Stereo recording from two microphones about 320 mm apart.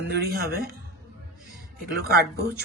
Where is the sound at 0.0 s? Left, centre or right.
Right.